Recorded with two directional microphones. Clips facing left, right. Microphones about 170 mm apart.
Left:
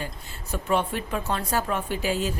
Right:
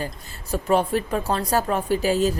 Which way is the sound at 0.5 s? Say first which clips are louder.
Right 5 dB; 35° right (ahead or behind).